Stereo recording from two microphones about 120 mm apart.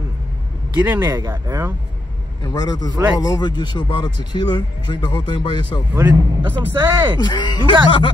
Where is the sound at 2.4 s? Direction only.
35° left (ahead or behind).